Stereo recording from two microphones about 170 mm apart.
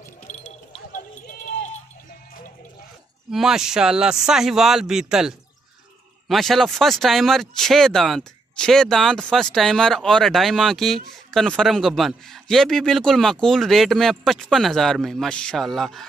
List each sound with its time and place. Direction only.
0.7 s run: 50° left (ahead or behind)
3.3 s speech: 5° right (ahead or behind)